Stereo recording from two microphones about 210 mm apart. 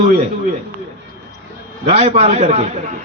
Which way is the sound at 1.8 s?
30° right (ahead or behind).